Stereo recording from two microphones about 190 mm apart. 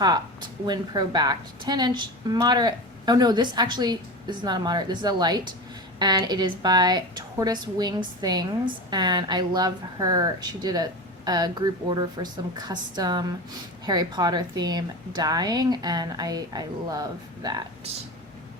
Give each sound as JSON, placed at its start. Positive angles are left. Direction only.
{"t": 0.6, "sound": "a woman's voice", "side_deg": -20}